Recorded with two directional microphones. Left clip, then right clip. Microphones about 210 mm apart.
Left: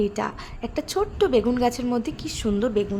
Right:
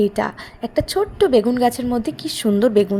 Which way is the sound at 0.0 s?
15° right (ahead or behind).